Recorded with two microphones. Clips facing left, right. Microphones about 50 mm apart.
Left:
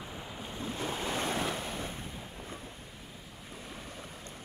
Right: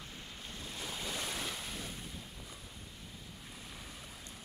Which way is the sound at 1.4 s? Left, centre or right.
Left.